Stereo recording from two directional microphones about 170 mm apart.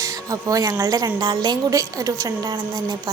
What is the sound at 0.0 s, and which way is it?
A woman's voice, 20° right (ahead or behind).